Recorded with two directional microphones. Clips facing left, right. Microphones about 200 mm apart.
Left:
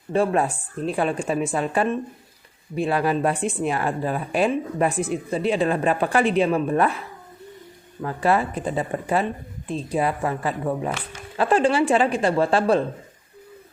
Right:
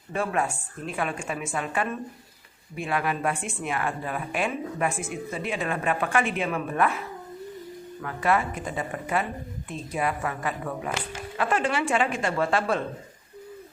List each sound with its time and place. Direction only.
0.1 s a woman's voice: 35° left (ahead or behind)
8.0 s a woman's voice: 30° left (ahead or behind)